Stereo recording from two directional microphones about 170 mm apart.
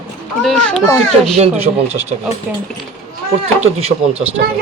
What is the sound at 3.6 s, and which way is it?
Speech, 35° right (ahead or behind).